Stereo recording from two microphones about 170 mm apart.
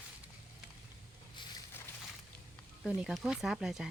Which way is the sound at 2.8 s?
Centre (ahead or behind).